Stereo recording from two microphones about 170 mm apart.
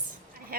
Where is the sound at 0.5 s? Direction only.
60° right (ahead or behind).